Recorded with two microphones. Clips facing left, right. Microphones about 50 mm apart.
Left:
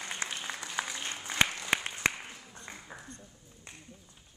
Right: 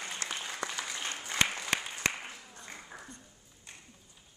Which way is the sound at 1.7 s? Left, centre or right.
Left.